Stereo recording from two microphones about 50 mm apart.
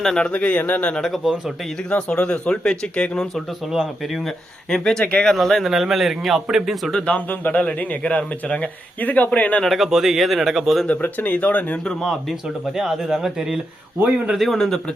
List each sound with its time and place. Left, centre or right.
0.2 s speech: left
1.0 s a man's voice: centre
1.9 s speech: left
3.3 s a man's voice: centre
4.7 s speech: centre
5.3 s a man's voice: centre
6.9 s a man's voice: left
9.6 s a man's voice: centre
11.0 s a man's voice: left
12.7 s a man's voice: centre